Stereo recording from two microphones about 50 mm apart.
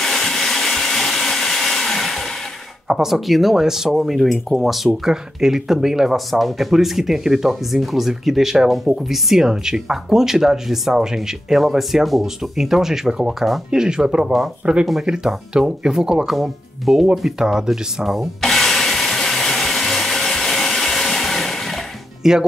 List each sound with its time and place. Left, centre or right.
0.0 s hair dryer: centre
2.9 s speech: centre
18.4 s a sound: centre
22.2 s speech: centre